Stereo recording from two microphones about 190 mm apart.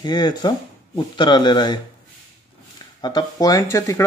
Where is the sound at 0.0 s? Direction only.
20° left (ahead or behind).